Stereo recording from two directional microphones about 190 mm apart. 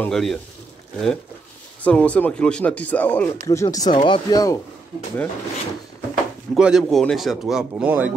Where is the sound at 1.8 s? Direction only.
5° left (ahead or behind).